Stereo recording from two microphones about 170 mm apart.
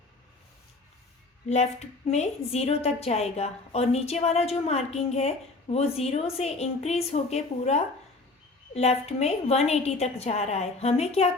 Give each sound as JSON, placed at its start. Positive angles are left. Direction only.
{"t": 2.0, "sound": "a woman's voice", "side_deg": 40}